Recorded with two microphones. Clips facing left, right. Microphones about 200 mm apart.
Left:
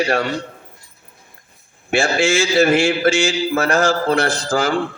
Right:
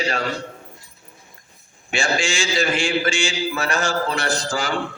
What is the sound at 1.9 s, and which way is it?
Mantra, 55° left (ahead or behind).